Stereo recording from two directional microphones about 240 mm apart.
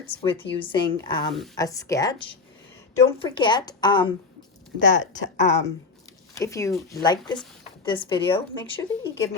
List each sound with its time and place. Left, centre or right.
0.1 s a woman's voice: left
4.9 s speech: left
6.3 s a woman's voice: centre